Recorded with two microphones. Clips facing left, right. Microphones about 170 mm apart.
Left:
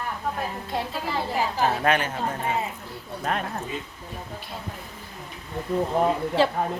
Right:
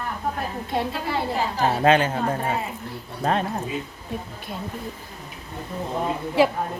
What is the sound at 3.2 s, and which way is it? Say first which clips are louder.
Speech: right 5 dB; 30° right (ahead or behind).